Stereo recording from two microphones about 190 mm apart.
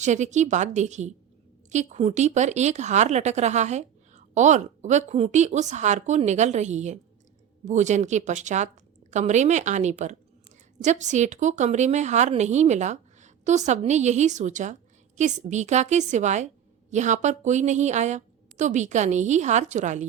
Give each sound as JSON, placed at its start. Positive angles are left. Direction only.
{"t": 0.0, "sound": "a woman's voice", "side_deg": -40}